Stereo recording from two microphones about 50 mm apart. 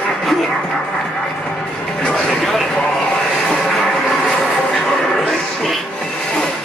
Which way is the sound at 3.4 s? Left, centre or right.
Centre.